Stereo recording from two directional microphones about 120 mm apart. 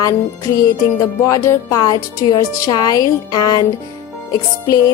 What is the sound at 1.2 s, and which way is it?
Music, 25° left (ahead or behind).